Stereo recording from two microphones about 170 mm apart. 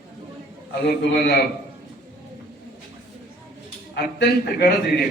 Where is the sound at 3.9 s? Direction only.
80° left.